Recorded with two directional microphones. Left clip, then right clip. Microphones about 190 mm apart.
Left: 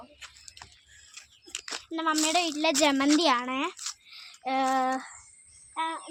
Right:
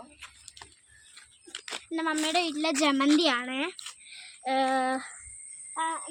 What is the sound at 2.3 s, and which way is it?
Speech, centre (ahead or behind).